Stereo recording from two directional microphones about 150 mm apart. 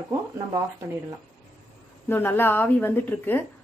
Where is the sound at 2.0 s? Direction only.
15° left (ahead or behind).